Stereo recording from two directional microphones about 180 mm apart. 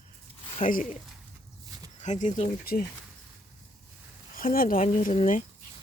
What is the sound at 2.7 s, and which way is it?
Speech, 55° left (ahead or behind).